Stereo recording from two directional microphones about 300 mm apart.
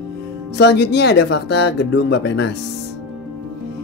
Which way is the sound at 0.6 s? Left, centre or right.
Left.